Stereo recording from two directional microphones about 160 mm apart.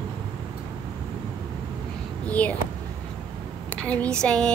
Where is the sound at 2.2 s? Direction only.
10° left (ahead or behind).